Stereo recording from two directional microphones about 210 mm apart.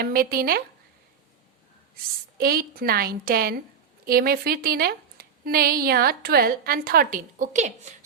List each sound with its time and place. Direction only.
0.0 s speech: 45° right (ahead or behind)
2.4 s speech: 45° right (ahead or behind)